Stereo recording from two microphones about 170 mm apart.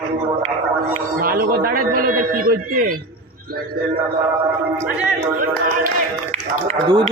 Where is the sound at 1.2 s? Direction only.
60° right (ahead or behind).